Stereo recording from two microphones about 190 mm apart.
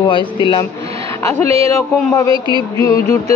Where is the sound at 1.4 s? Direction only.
30° right (ahead or behind).